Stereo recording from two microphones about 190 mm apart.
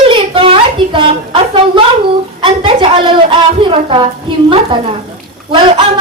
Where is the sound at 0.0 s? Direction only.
30° right (ahead or behind).